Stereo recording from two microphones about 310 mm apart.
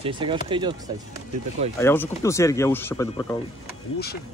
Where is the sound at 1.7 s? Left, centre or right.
Centre.